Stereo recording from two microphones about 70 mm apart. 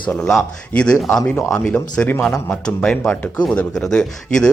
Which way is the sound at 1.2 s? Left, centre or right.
Left.